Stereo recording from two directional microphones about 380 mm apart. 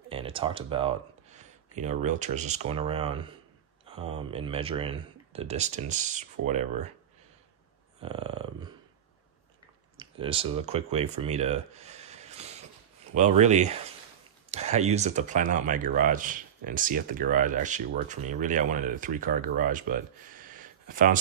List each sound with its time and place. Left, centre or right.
0.1 s speech: centre
8.0 s speech: centre
9.9 s speech: centre